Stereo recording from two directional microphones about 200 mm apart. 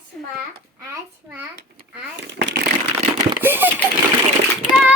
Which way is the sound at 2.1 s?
60° right (ahead or behind).